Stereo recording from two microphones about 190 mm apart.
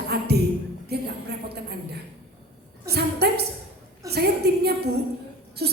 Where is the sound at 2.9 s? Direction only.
60° right (ahead or behind).